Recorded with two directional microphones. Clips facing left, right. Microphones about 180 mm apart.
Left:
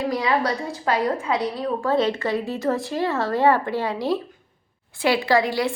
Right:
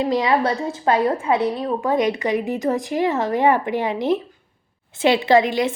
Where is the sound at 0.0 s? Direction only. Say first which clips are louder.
Right 3 dB; 25° right (ahead or behind).